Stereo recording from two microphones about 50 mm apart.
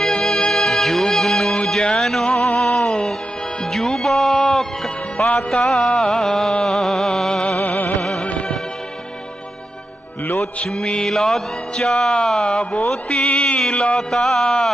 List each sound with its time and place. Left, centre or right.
0.0 s music: centre
2.8 s music: centre
5.4 s mantra: centre
6.7 s a sound: centre
7.6 s music: left
8.2 s music of bollywood: left
10.4 s mantra: centre
13.6 s a sound: centre
14.1 s mantra: centre